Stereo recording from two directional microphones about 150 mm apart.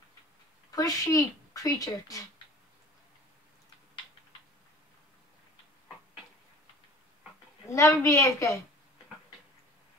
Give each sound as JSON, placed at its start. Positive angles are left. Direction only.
{"t": 0.7, "sound": "a woman's voice", "side_deg": 25}
{"t": 7.7, "sound": "a woman's voice", "side_deg": 20}